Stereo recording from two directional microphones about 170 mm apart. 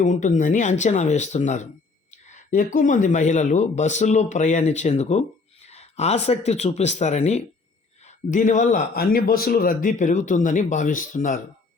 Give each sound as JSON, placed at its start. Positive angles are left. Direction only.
{"t": 0.0, "sound": "a man's voice", "side_deg": 45}